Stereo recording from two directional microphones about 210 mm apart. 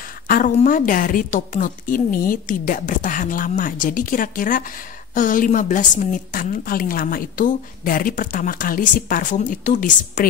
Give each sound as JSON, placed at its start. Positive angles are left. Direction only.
{"t": 0.3, "sound": "a woman's voice", "side_deg": 40}